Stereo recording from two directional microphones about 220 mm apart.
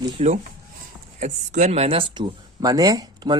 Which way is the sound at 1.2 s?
35° right (ahead or behind).